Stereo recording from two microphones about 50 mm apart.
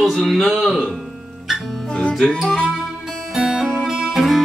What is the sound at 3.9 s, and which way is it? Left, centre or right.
Music, centre.